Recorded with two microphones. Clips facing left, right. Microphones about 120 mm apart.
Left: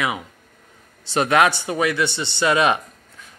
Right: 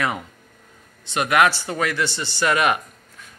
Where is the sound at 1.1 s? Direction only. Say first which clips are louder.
Left 1 dB; 30° left (ahead or behind).